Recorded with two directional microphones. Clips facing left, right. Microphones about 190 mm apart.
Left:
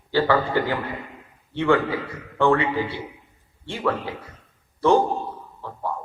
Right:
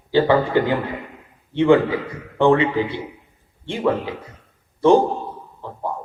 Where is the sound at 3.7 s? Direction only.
20° right (ahead or behind).